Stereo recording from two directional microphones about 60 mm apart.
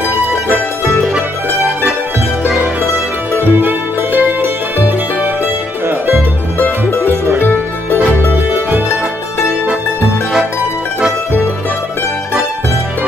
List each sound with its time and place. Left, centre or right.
3.3 s music: right
6.9 s music: left